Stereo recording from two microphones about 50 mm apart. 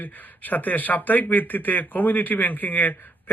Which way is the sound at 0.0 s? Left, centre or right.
Left.